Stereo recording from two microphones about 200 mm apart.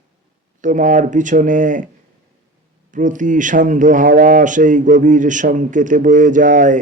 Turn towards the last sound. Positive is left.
turn(degrees=-40)  # may be behind; listen again after turning